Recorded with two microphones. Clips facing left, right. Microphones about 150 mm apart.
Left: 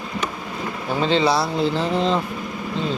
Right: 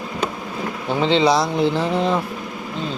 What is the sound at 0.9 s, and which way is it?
Speech, 20° right (ahead or behind).